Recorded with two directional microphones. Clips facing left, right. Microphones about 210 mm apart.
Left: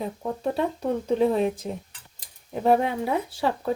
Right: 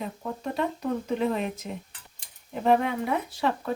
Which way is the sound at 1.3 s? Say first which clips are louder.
Left 6 dB; 30° left (ahead or behind).